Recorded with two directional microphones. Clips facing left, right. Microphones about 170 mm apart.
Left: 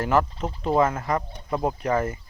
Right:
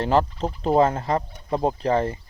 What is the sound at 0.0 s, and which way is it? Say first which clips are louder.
Speech: right 2 dB; 30° right (ahead or behind).